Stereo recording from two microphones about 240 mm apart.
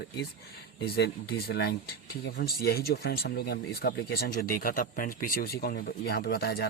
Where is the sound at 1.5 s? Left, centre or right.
Left.